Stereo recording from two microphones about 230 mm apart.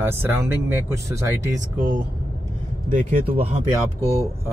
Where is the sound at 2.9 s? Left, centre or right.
Right.